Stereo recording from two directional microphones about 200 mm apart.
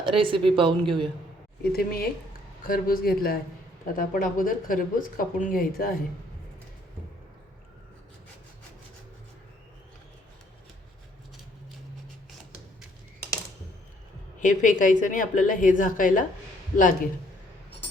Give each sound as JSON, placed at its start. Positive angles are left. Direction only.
{"t": 0.0, "sound": "speech", "side_deg": -25}
{"t": 1.7, "sound": "speech", "side_deg": 50}
{"t": 14.4, "sound": "a woman's voice", "side_deg": 40}